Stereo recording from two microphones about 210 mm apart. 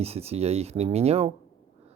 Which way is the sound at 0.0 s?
30° right (ahead or behind).